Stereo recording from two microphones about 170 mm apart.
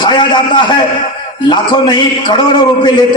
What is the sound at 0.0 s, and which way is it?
A man's voice, 25° left (ahead or behind).